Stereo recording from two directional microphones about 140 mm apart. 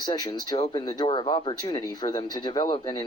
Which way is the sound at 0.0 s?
30° left (ahead or behind).